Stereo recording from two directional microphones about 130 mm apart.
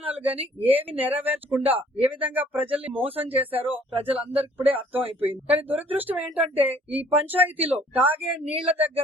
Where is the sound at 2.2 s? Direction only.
15° right (ahead or behind).